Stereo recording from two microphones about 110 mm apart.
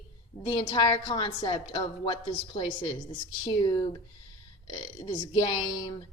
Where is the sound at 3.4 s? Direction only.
40° left (ahead or behind).